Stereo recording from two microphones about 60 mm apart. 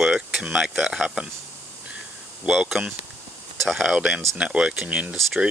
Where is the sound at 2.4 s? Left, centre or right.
Centre.